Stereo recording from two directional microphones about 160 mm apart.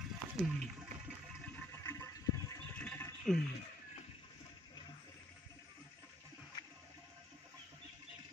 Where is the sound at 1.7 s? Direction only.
20° left (ahead or behind).